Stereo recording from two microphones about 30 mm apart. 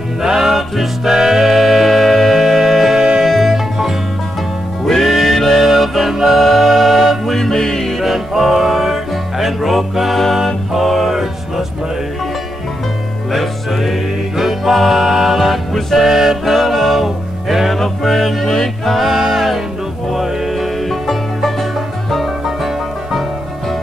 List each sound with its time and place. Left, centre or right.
0.2 s music: centre
0.5 s music: centre
3.5 s music: centre
5.0 s music: centre
6.3 s music: centre
7.3 s music: centre
8.0 s music: centre
13.3 s music: centre
15.3 s music: centre
17.0 s music: centre
17.7 s music: centre
18.5 s choir: centre
19.0 s music: centre